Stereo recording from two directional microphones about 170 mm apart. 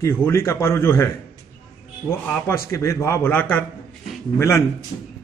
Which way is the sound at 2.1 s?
10° left (ahead or behind).